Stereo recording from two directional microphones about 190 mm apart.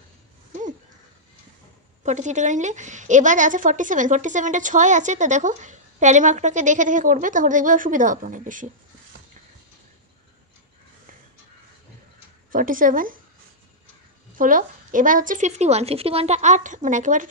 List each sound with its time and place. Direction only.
2.0 s a woman's voice: 40° right (ahead or behind)
12.4 s a woman's voice: 45° right (ahead or behind)
14.3 s a woman's voice: 45° right (ahead or behind)